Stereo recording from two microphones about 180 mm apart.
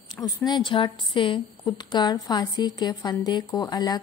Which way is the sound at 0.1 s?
20° left (ahead or behind).